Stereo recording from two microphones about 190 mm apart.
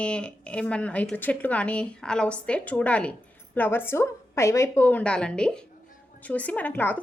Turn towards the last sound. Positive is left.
turn(degrees=10)  # may be behind; listen again after turning